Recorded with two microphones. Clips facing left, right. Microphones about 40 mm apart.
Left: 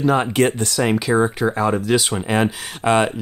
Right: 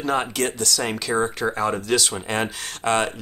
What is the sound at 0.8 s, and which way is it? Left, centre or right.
Speech, centre.